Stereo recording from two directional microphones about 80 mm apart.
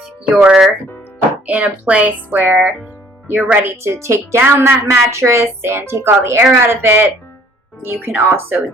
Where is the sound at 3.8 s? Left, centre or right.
Right.